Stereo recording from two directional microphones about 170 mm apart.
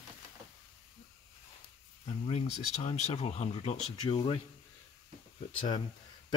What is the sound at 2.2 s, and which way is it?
Speech, 40° left (ahead or behind).